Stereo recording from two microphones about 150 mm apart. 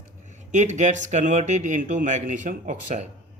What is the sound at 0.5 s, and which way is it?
Speech, 55° right (ahead or behind).